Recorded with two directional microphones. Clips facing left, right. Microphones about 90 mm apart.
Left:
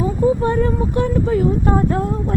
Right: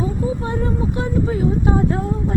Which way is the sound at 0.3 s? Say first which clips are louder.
Left 6 dB; 60° left (ahead or behind).